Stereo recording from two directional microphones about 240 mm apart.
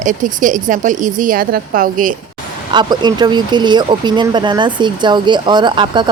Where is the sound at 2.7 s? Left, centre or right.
Centre.